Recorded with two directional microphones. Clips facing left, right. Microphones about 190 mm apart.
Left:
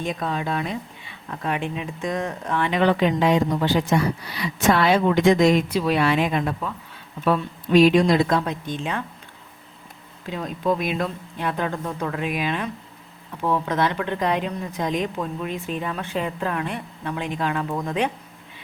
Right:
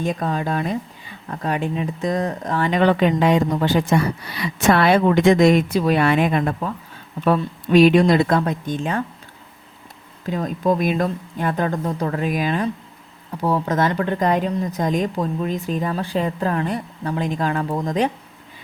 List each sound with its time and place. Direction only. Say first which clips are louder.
0.0 s speech: right 4 dB; 45° right (ahead or behind)
7.8 s speech: right 2 dB; 55° right (ahead or behind)
10.2 s speech: right 4 dB; 45° right (ahead or behind)